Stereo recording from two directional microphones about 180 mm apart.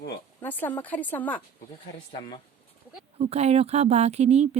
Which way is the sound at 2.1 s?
30° left (ahead or behind).